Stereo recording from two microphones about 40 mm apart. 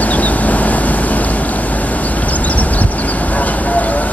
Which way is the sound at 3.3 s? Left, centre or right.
Left.